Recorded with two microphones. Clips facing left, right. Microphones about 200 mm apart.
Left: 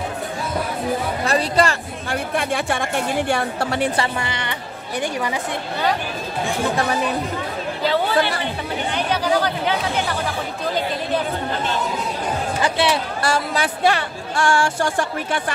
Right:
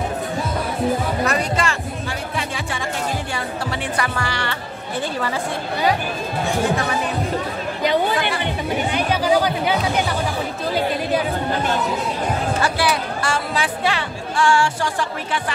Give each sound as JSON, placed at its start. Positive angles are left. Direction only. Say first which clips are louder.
{"t": 1.2, "sound": "speech", "louder": "left 2 dB", "side_deg": 30}
{"t": 2.0, "sound": "speech", "louder": "left 8 dB", "side_deg": 55}
{"t": 3.9, "sound": "speech", "louder": "left 1 dB", "side_deg": 25}
{"t": 7.8, "sound": "speech", "louder": "even", "side_deg": -15}
{"t": 12.6, "sound": "speech", "louder": "left 4 dB", "side_deg": 25}
{"t": 13.2, "sound": "speech", "louder": "left 2 dB", "side_deg": 40}